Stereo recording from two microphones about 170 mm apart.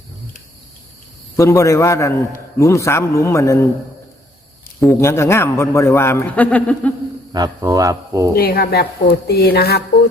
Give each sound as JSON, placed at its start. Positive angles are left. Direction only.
{"t": 1.4, "sound": "a man's voice", "side_deg": 15}
{"t": 4.9, "sound": "a man's voice", "side_deg": 15}
{"t": 7.3, "sound": "speech", "side_deg": -20}
{"t": 8.4, "sound": "speech", "side_deg": 60}